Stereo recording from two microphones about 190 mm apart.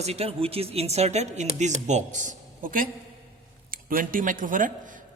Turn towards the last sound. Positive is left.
turn(degrees=-45)  # may be behind; listen again after turning